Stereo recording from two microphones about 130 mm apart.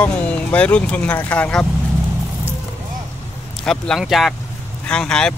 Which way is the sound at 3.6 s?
5° left (ahead or behind).